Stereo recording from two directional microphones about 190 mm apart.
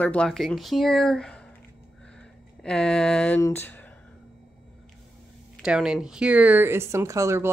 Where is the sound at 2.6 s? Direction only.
5° left (ahead or behind).